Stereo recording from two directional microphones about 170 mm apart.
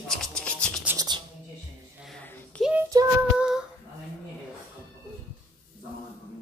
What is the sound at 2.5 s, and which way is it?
Child singing, 5° left (ahead or behind).